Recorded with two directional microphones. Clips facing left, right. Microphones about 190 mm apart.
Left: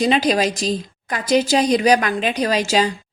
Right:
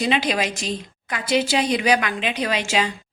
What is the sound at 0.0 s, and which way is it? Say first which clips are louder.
A woman's voice: left 5 dB; 40° left (ahead or behind).